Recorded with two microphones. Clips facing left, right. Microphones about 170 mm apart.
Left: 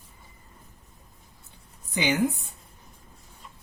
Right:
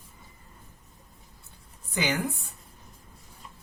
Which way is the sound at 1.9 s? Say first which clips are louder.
Left 2 dB; 20° left (ahead or behind).